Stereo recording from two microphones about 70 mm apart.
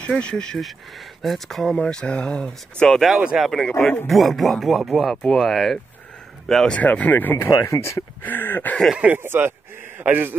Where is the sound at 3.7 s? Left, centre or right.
Left.